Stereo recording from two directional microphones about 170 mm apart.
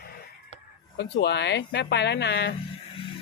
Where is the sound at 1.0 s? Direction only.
90° left.